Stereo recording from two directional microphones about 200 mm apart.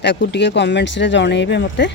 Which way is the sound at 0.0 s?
60° left (ahead or behind).